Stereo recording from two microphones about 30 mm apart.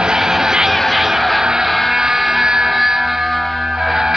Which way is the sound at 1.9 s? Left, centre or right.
Centre.